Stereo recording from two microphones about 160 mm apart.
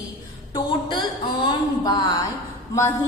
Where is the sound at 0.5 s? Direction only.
30° left (ahead or behind).